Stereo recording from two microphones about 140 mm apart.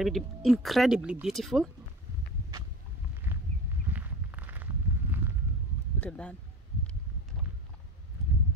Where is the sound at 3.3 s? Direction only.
15° right (ahead or behind).